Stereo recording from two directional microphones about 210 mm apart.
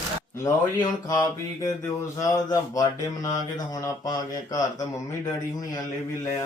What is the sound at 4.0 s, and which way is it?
Speech, 20° left (ahead or behind).